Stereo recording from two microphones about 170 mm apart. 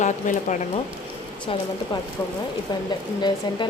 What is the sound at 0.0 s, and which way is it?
Speech, 45° left (ahead or behind).